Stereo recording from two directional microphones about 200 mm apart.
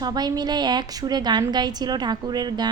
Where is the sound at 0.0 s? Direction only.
20° right (ahead or behind).